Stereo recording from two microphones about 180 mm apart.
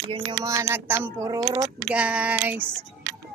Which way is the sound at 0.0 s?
25° right (ahead or behind).